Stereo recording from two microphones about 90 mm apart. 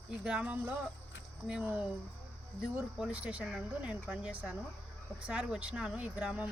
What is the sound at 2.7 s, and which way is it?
Speech, 10° right (ahead or behind).